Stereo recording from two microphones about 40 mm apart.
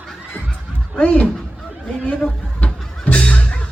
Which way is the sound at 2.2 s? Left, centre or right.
Left.